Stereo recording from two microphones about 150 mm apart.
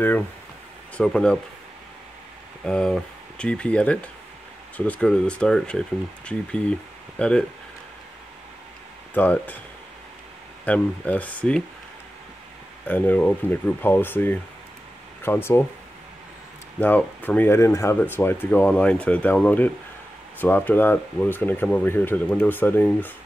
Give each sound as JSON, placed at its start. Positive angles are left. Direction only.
{"t": 0.9, "sound": "speech", "side_deg": 5}
{"t": 2.6, "sound": "speech", "side_deg": 5}
{"t": 9.1, "sound": "speech", "side_deg": 10}
{"t": 10.6, "sound": "speech", "side_deg": 10}
{"t": 12.8, "sound": "speech", "side_deg": 10}
{"t": 16.8, "sound": "speech", "side_deg": 10}